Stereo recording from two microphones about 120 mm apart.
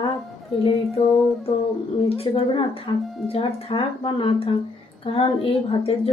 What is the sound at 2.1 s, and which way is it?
A woman's voice, 55° left (ahead or behind).